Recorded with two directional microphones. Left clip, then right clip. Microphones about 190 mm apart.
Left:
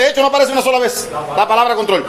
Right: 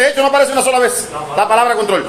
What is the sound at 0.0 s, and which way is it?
A man's voice, 35° left (ahead or behind).